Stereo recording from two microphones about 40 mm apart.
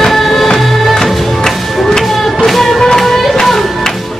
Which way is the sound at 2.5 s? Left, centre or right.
Centre.